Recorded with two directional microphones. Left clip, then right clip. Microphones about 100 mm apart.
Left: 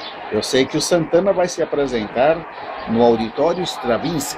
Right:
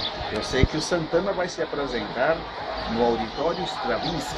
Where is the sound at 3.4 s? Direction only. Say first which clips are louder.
Left 7 dB; 55° left (ahead or behind).